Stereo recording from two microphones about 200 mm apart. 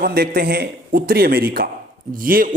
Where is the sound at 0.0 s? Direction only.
50° right (ahead or behind).